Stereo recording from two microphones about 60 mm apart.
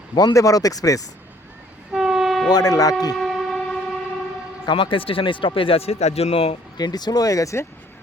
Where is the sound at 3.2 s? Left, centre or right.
Centre.